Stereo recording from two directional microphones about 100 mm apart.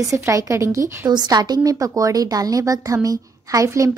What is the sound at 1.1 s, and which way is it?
A woman's voice, 45° right (ahead or behind).